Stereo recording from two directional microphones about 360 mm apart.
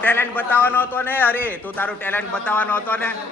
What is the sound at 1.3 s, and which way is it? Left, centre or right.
Speech, centre.